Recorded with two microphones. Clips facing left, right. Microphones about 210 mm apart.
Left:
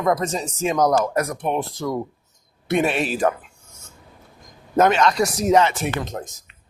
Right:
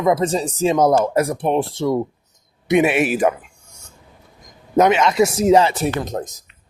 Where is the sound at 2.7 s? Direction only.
15° right (ahead or behind).